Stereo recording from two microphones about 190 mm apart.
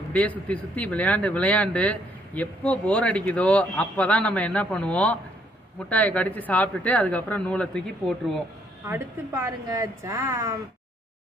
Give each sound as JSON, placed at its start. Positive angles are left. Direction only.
{"t": 0.1, "sound": "speech", "side_deg": 10}
{"t": 8.8, "sound": "a woman's voice", "side_deg": -15}